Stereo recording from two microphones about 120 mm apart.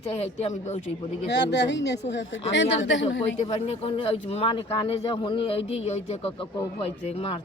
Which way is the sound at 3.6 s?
55° left (ahead or behind).